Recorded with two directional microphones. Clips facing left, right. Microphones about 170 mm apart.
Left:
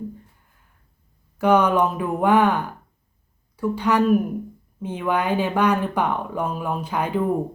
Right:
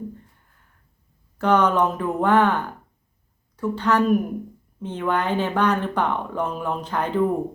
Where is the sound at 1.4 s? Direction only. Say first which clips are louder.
Left 1 dB; 10° left (ahead or behind).